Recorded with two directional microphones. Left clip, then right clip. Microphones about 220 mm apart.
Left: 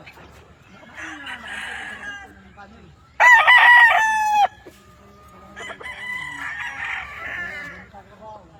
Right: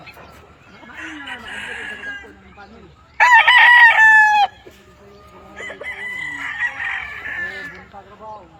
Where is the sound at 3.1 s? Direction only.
15° left (ahead or behind).